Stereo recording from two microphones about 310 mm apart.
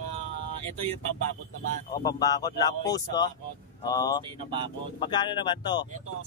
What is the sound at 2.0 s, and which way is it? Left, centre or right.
Speech, centre.